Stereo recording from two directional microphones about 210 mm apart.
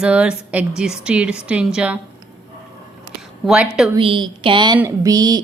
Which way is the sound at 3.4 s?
5° right (ahead or behind).